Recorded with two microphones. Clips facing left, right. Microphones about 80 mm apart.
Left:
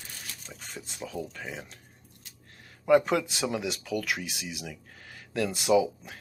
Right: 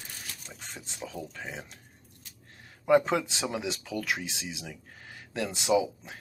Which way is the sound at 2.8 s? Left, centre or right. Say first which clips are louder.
Left 1 dB; right.